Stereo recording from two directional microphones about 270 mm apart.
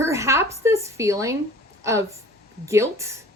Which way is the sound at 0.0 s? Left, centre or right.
Centre.